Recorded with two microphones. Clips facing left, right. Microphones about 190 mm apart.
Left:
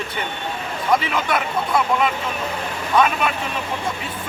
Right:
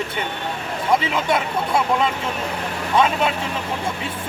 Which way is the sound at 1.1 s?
25° right (ahead or behind).